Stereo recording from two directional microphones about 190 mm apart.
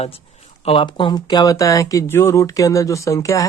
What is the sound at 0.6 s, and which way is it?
Speech, 30° left (ahead or behind).